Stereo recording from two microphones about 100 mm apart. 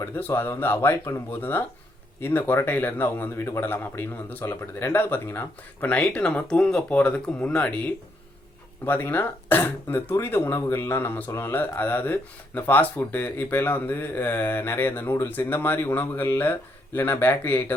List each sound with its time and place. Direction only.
0.2 s speech: 20° left (ahead or behind)
8.8 s speech: 20° left (ahead or behind)